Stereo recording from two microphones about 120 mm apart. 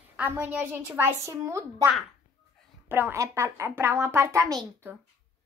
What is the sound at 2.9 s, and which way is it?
Speech, 20° right (ahead or behind).